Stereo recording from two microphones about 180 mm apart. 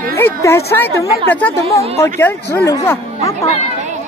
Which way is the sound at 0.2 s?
15° left (ahead or behind).